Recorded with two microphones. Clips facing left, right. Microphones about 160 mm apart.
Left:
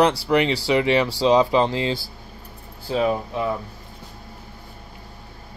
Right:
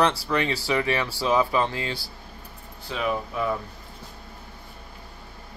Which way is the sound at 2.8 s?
35° left (ahead or behind).